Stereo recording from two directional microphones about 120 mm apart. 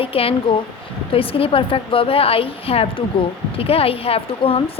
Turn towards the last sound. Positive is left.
turn(degrees=50)  # may be behind; listen again after turning